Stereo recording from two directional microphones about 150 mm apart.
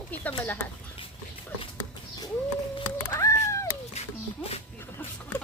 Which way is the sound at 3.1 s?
20° left (ahead or behind).